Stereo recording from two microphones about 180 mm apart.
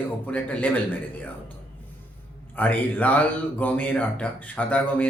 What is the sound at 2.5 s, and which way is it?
Speech, 10° left (ahead or behind).